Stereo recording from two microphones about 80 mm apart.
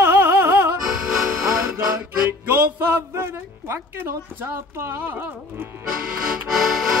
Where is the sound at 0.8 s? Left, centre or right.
Centre.